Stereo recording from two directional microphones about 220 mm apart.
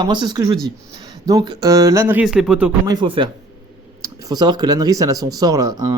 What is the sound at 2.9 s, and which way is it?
Speech, 20° right (ahead or behind).